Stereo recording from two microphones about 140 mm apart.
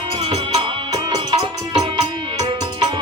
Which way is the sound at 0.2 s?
45° right (ahead or behind).